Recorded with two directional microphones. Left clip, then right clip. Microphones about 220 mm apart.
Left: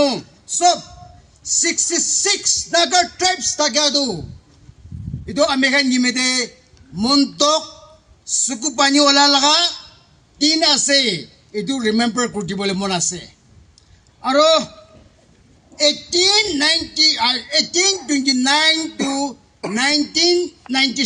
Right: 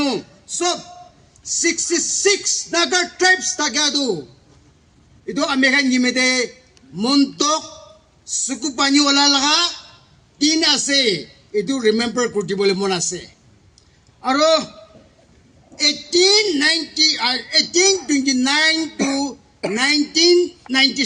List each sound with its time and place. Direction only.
0.0 s a man's voice: 40° left (ahead or behind)
5.2 s a man's voice: 40° left (ahead or behind)
15.7 s a man's voice: 40° left (ahead or behind)